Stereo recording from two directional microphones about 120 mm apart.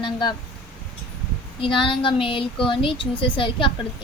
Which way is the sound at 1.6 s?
45° left (ahead or behind).